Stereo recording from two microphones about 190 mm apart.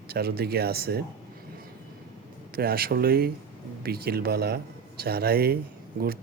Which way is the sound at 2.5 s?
55° right (ahead or behind).